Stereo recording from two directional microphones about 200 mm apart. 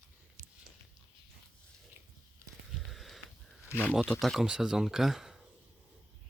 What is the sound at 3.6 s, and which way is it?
Speech, 10° left (ahead or behind).